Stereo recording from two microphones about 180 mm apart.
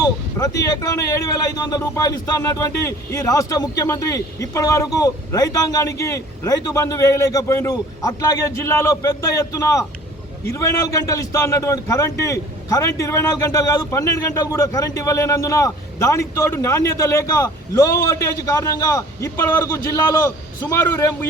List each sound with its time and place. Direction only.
0.0 s a man's voice: 20° left (ahead or behind)